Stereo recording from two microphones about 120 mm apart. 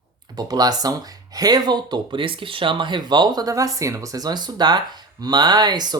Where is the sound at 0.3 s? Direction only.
35° right (ahead or behind).